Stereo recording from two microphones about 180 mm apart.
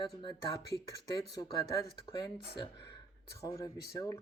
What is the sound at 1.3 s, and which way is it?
Speech, 25° left (ahead or behind).